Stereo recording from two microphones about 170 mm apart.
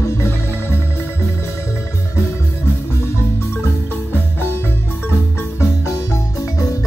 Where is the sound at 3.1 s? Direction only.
15° left (ahead or behind).